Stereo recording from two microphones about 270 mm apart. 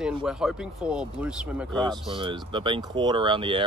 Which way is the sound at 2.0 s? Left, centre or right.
Centre.